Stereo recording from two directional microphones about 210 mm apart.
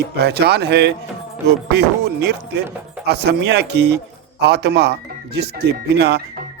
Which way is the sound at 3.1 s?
50° right (ahead or behind).